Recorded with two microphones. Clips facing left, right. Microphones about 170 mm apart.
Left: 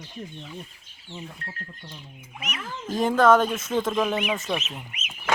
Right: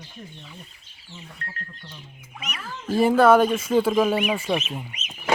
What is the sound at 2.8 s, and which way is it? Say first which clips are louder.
Speech: right 3 dB; 10° right (ahead or behind).